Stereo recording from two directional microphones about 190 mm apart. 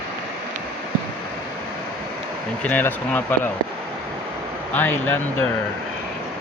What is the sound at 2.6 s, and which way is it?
Speech, 10° left (ahead or behind).